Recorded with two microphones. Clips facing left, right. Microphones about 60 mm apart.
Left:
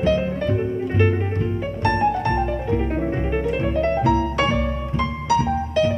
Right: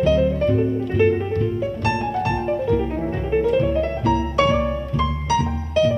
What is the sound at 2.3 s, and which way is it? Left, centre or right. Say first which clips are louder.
Music: right 1 dB; left.